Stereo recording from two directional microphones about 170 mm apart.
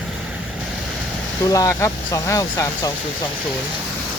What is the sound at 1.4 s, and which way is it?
Speech, 20° left (ahead or behind).